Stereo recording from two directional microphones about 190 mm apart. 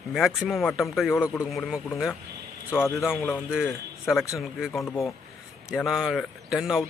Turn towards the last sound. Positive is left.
turn(degrees=0)  # may be behind; listen again after turning